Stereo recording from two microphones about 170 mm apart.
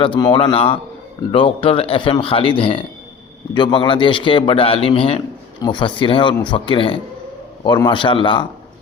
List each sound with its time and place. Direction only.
0.0 s a man's voice: 25° left (ahead or behind)